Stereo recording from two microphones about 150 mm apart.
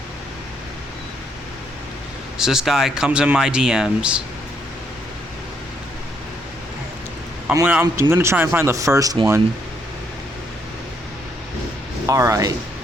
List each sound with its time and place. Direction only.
2.4 s speech: 5° right (ahead or behind)
7.6 s speech: 10° right (ahead or behind)
12.0 s speech: 20° right (ahead or behind)